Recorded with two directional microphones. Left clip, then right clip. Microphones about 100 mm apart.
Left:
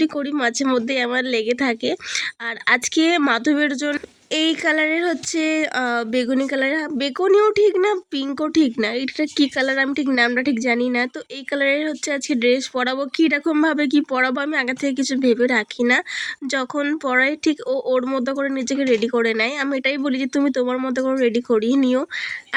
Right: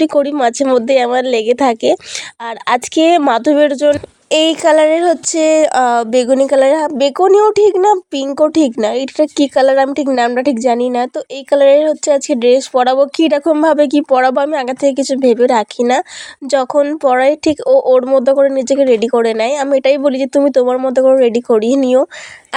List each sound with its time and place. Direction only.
0.0 s speech: 50° right (ahead or behind)
16.5 s speech: 35° right (ahead or behind)